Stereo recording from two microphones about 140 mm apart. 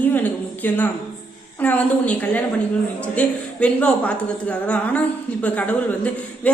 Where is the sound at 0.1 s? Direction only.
10° left (ahead or behind).